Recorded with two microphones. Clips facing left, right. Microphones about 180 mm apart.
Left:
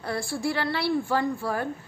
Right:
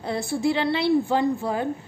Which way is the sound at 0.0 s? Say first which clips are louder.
Right 4 dB; 20° right (ahead or behind).